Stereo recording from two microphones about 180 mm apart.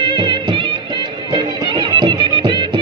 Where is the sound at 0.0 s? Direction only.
25° right (ahead or behind).